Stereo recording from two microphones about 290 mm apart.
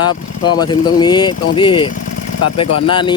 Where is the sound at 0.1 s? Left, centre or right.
Left.